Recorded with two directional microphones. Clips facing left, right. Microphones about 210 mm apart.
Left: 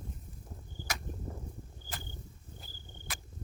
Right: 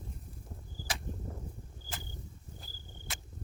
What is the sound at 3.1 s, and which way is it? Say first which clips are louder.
Cricket: left 1 dB; 25° right (ahead or behind).